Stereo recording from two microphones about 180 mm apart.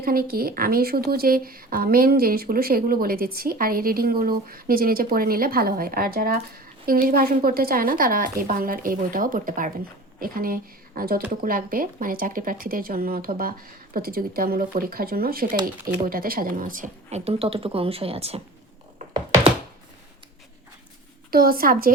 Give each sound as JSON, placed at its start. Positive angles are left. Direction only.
{"t": 0.0, "sound": "speech", "side_deg": -55}
{"t": 21.2, "sound": "speech", "side_deg": -55}